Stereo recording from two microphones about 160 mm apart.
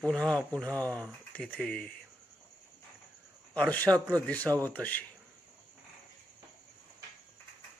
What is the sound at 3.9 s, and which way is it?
Speech, 20° right (ahead or behind).